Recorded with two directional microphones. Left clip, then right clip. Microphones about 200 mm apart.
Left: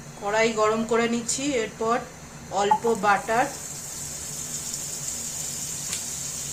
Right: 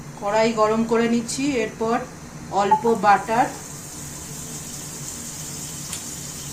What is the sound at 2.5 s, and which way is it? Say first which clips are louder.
Speech: right 4 dB; 15° left (ahead or behind).